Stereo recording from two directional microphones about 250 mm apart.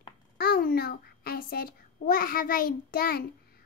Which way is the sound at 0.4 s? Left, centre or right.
Left.